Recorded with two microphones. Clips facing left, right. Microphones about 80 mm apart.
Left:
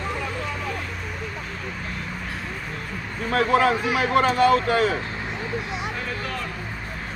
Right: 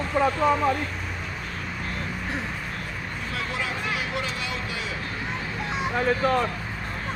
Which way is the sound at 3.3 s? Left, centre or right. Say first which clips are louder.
Left 13 dB; left.